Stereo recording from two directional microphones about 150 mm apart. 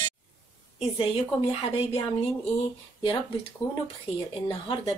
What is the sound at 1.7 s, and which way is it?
Speech, 40° left (ahead or behind).